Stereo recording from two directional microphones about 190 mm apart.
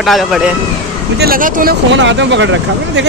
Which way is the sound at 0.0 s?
Centre (ahead or behind).